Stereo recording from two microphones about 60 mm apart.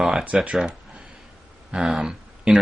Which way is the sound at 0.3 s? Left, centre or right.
Centre.